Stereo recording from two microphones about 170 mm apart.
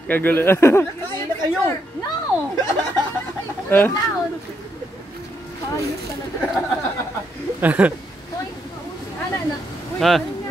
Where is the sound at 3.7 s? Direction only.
10° left (ahead or behind).